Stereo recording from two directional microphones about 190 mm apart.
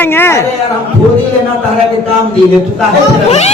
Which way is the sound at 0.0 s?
10° left (ahead or behind).